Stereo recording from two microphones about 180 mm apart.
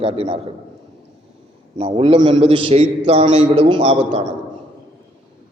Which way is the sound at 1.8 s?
35° right (ahead or behind).